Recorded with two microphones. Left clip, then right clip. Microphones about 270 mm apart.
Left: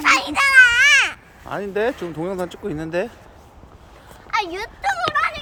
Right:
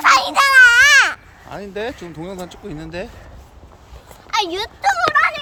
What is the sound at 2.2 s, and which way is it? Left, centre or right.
Speech, centre.